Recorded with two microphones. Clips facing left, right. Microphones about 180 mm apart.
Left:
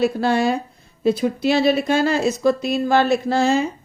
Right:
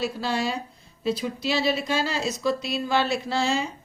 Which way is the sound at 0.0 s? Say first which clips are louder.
Left 9 dB; 55° left (ahead or behind).